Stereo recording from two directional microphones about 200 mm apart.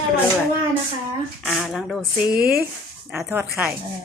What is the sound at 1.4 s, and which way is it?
Speech, centre (ahead or behind).